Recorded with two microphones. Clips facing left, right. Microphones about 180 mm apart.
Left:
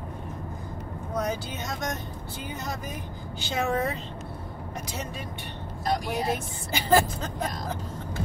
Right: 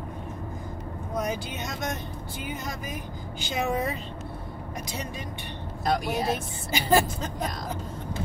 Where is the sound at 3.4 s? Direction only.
15° right (ahead or behind).